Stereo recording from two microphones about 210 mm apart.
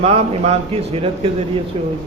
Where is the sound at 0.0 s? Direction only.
30° right (ahead or behind).